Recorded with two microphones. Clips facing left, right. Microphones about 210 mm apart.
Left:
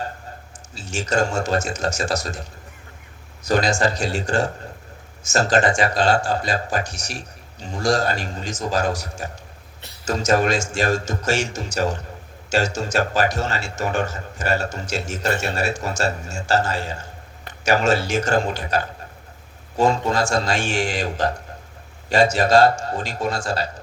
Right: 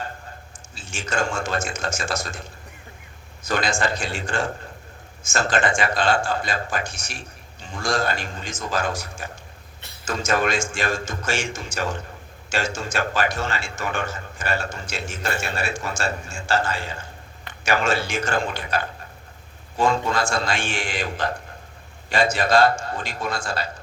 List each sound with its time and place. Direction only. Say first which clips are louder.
0.8 s a man's voice: left 5 dB; 40° left (ahead or behind)